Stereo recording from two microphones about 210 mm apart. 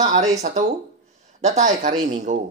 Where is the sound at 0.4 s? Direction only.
35° right (ahead or behind).